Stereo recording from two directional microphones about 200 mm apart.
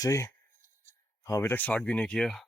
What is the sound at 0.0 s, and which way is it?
Speech, 15° left (ahead or behind).